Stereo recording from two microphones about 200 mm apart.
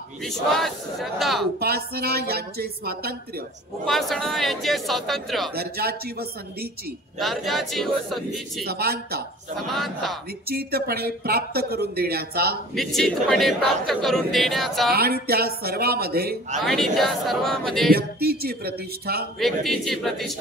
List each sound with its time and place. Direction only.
0.2 s speech: centre (ahead or behind)
1.6 s speech: 50° right (ahead or behind)
3.8 s speech: centre (ahead or behind)
5.5 s speech: 50° right (ahead or behind)
7.2 s speech: centre (ahead or behind)
8.6 s speech: 50° right (ahead or behind)
9.7 s speech: centre (ahead or behind)
10.5 s speech: 50° right (ahead or behind)
12.7 s speech: centre (ahead or behind)
14.9 s speech: 50° right (ahead or behind)
16.5 s speech: centre (ahead or behind)
17.9 s speech: 50° right (ahead or behind)
19.4 s speech: centre (ahead or behind)